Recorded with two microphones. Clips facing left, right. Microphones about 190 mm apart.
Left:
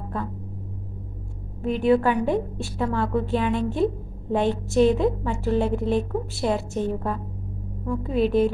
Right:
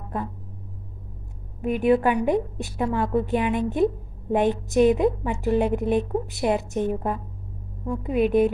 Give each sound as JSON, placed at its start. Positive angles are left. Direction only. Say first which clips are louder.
{"t": 1.6, "sound": "a woman's voice", "louder": "even", "side_deg": -15}